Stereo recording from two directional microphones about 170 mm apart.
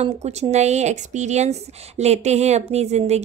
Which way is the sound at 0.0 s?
40° right (ahead or behind).